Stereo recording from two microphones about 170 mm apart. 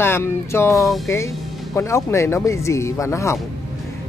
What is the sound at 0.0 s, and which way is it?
Speech, 15° left (ahead or behind).